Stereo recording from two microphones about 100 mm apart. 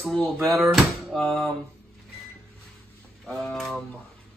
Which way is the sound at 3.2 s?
5° left (ahead or behind).